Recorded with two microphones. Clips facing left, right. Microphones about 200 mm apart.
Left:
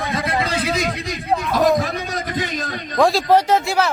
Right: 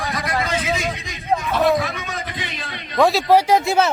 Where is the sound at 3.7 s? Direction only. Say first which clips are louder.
Right 2 dB; 20° right (ahead or behind).